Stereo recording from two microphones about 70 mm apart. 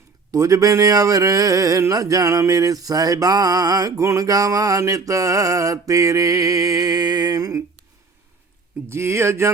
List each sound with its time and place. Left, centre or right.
0.3 s a sound: right
1.9 s mantra: right
8.9 s speech: right